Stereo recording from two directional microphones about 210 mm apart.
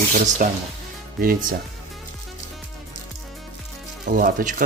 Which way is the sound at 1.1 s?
45° right (ahead or behind).